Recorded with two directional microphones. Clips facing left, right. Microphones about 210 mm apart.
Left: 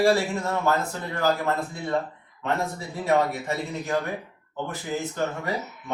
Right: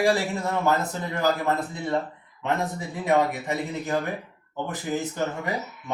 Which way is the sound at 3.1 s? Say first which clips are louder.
Right 1 dB; 15° right (ahead or behind).